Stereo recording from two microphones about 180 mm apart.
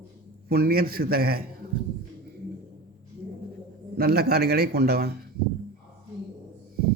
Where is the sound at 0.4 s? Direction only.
60° right (ahead or behind).